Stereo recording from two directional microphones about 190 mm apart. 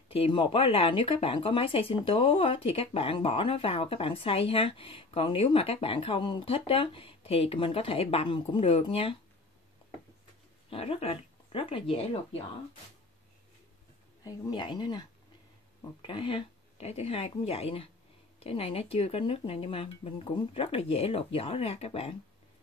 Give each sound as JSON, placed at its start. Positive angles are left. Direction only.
{"t": 0.1, "sound": "speech", "side_deg": 30}
{"t": 10.7, "sound": "speech", "side_deg": 30}
{"t": 14.2, "sound": "speech", "side_deg": 20}